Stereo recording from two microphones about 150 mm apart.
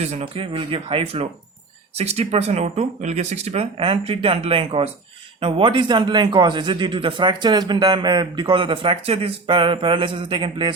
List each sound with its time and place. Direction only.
0.0 s a man's voice: 40° right (ahead or behind)